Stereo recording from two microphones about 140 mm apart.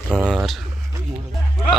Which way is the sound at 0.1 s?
5° right (ahead or behind).